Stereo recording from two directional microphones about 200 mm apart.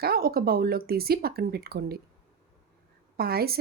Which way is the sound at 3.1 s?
50° right (ahead or behind).